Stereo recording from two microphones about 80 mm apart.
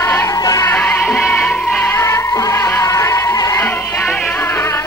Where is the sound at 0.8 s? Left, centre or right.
Centre.